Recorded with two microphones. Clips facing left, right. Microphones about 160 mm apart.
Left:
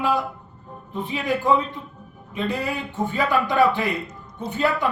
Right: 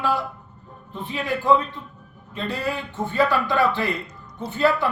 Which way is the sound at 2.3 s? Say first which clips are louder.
Left 1 dB; 15° left (ahead or behind).